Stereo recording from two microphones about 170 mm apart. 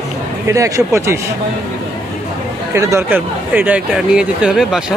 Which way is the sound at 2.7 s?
15° right (ahead or behind).